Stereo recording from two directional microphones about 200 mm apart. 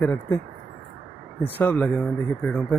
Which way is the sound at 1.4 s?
10° left (ahead or behind).